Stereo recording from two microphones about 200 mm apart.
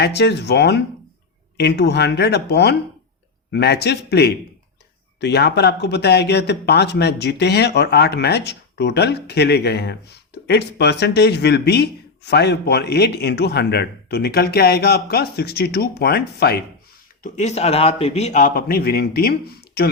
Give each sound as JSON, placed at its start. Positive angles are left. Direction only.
{"t": 0.0, "sound": "a man's voice", "side_deg": 55}
{"t": 17.2, "sound": "a man's voice", "side_deg": 35}